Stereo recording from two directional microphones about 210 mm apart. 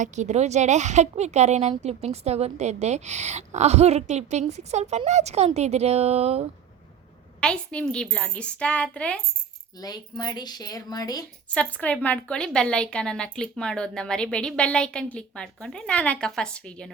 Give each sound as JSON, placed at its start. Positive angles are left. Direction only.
{"t": 0.0, "sound": "a woman's voice", "side_deg": -35}
{"t": 7.4, "sound": "a woman's voice", "side_deg": 5}
{"t": 9.8, "sound": "speech", "side_deg": 20}
{"t": 11.5, "sound": "a woman's voice", "side_deg": 5}